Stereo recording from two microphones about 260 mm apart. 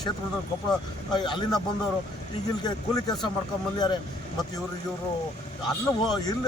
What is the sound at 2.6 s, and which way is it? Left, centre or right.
Speech, centre.